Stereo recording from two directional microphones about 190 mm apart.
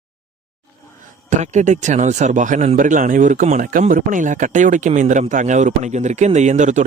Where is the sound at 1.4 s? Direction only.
40° right (ahead or behind).